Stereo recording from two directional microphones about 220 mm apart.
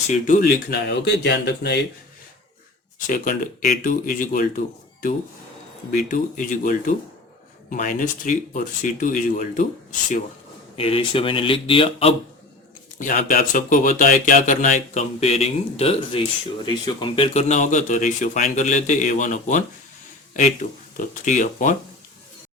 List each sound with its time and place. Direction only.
0.1 s speech: 35° left (ahead or behind)
3.1 s speech: 40° left (ahead or behind)
10.8 s speech: 25° left (ahead or behind)
13.0 s speech: 35° left (ahead or behind)